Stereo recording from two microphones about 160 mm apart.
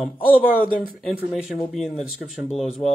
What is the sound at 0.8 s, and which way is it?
Speech, centre (ahead or behind).